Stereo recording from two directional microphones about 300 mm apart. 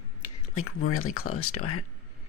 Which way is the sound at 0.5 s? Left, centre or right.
Left.